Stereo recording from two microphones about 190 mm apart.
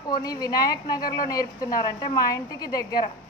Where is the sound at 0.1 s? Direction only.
20° left (ahead or behind).